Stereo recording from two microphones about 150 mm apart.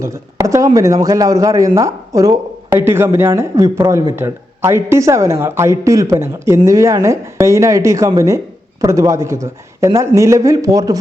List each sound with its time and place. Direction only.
0.0 s speech: 20° right (ahead or behind)